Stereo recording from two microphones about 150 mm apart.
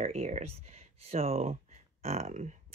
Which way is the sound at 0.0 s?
45° right (ahead or behind).